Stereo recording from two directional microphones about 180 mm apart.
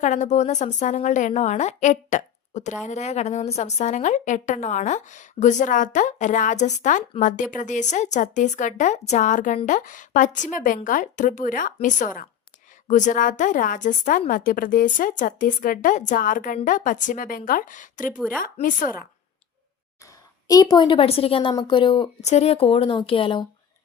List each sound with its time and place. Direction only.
0.0 s a woman's voice: 40° left (ahead or behind)
20.5 s a woman's voice: 20° left (ahead or behind)
22.2 s a woman's voice: 35° left (ahead or behind)